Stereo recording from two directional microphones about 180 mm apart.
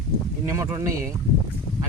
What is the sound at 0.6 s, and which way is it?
Speech, 20° right (ahead or behind).